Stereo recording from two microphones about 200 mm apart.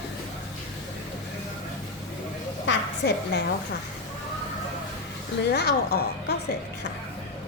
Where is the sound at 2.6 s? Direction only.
55° left (ahead or behind).